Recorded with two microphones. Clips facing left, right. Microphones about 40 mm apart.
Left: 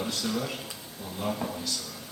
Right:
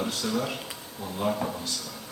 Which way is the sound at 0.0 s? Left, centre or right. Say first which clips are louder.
Right 2 dB; centre.